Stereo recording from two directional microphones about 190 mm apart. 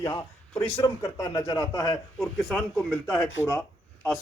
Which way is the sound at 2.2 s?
Centre (ahead or behind).